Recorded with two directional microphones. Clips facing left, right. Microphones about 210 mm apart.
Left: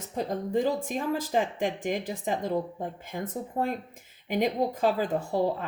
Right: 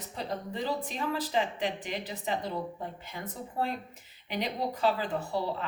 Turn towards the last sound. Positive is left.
turn(degrees=45)  # may be behind; listen again after turning